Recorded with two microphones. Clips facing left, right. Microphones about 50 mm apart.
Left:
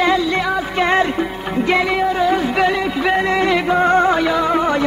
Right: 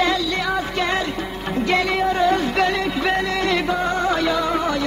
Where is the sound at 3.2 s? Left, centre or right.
Left.